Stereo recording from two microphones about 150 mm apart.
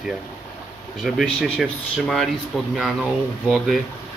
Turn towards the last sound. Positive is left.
turn(degrees=0)  # may be behind; listen again after turning